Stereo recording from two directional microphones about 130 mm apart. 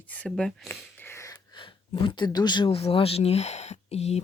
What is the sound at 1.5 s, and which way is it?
Speech, 35° left (ahead or behind).